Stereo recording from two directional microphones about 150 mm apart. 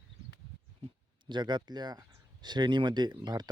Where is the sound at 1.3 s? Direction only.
30° right (ahead or behind).